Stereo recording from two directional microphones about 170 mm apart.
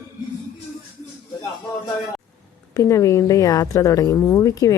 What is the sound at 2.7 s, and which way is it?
A woman's voice, 20° left (ahead or behind).